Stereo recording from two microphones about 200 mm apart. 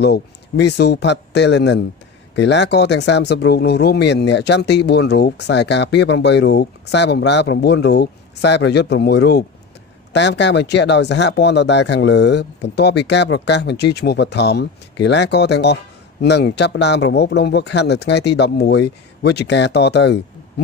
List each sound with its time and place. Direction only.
0.0 s speech: 60° left (ahead or behind)